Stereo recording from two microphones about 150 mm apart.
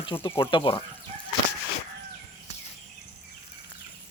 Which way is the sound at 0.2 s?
15° left (ahead or behind).